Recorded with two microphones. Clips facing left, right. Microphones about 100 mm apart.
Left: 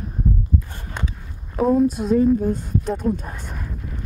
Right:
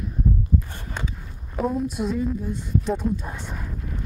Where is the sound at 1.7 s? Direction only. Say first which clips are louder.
Left 10 dB; 40° left (ahead or behind).